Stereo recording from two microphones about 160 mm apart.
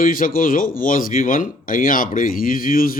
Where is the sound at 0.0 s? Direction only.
60° left (ahead or behind).